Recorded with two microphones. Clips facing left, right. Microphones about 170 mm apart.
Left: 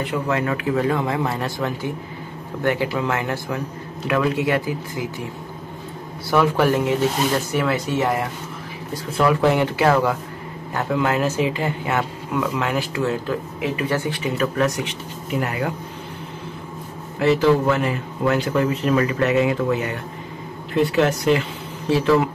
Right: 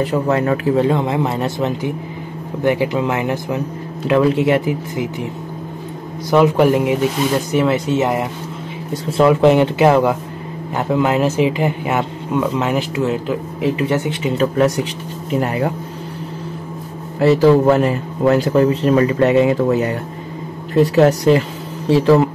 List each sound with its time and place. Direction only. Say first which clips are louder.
0.0 s speech: right 6 dB; 40° right (ahead or behind); by 5.0 s 20° right (ahead or behind)
6.3 s speech: right 5 dB; 20° right (ahead or behind)
17.2 s speech: right 5 dB; 35° right (ahead or behind)